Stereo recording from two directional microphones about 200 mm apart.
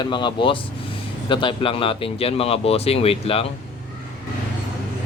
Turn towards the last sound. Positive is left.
turn(degrees=30)  # may be behind; listen again after turning